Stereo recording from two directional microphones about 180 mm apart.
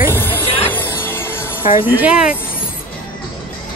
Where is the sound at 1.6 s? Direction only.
45° left (ahead or behind).